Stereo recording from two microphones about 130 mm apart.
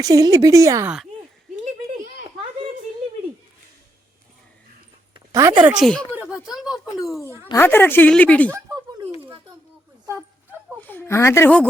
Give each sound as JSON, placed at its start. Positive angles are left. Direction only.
{"t": 0.0, "sound": "speech", "side_deg": -25}
{"t": 5.3, "sound": "speech", "side_deg": -25}
{"t": 5.8, "sound": "a woman's voice", "side_deg": 5}
{"t": 6.1, "sound": "a sound", "side_deg": -5}
{"t": 7.5, "sound": "a woman's voice", "side_deg": 15}
{"t": 10.8, "sound": "a woman's voice", "side_deg": 15}